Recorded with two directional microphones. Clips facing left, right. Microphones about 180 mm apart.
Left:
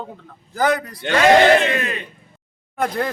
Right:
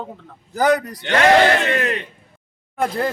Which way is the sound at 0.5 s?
40° right (ahead or behind).